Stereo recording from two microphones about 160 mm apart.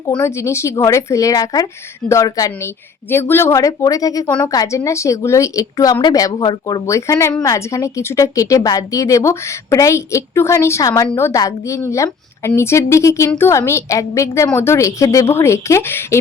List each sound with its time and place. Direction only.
0.2 s a woman's voice: 20° left (ahead or behind)